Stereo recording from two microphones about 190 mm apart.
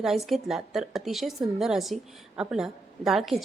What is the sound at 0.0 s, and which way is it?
A woman's voice, centre (ahead or behind).